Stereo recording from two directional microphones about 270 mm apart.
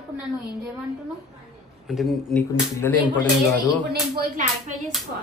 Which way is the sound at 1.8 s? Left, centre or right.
Centre.